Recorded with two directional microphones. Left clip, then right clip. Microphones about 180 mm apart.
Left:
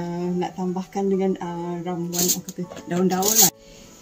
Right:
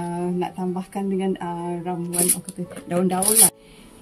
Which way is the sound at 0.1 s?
30° right (ahead or behind).